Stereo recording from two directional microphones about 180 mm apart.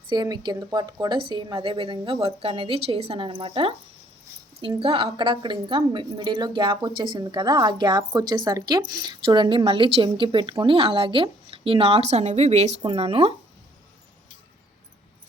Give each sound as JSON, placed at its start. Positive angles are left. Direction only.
{"t": 0.1, "sound": "speech", "side_deg": -25}
{"t": 4.8, "sound": "speech", "side_deg": -30}